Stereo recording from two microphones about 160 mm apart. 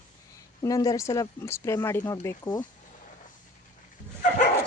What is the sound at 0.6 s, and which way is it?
Speech, 25° left (ahead or behind).